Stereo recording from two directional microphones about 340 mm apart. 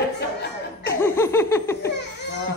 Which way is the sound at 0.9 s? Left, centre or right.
Centre.